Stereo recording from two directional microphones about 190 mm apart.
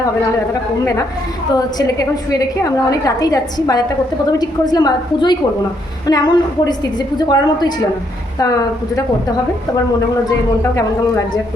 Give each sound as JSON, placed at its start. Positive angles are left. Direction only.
{"t": 1.5, "sound": "a woman's voice", "side_deg": 20}